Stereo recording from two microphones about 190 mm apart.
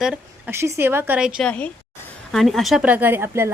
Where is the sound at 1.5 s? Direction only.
5° left (ahead or behind).